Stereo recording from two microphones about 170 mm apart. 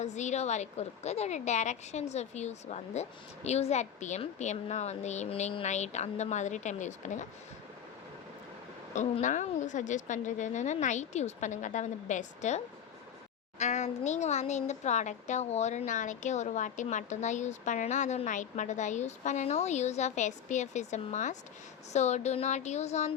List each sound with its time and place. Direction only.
0.0 s a woman's voice: 40° left (ahead or behind)
9.0 s a woman's voice: 45° left (ahead or behind)